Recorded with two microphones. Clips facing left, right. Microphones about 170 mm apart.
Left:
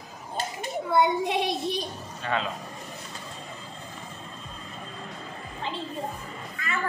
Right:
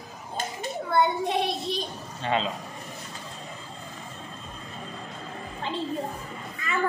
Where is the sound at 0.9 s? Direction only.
15° left (ahead or behind).